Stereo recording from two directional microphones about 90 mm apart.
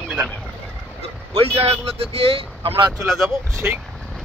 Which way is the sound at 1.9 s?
90° right.